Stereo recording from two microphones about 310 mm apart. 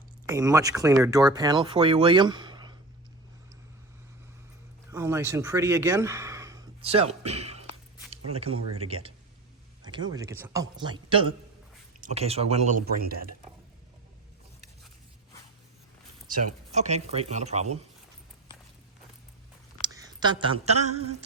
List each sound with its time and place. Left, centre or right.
0.3 s speech: centre
4.9 s speech: centre; by 13.2 s right
16.7 s speech: right
19.8 s speech: centre